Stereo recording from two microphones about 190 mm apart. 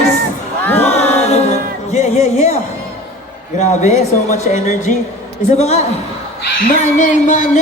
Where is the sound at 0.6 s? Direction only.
10° left (ahead or behind).